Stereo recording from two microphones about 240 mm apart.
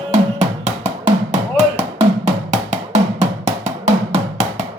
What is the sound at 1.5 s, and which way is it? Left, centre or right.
Music, right.